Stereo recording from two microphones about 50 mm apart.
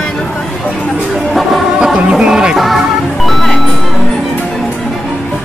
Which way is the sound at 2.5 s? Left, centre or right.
Centre.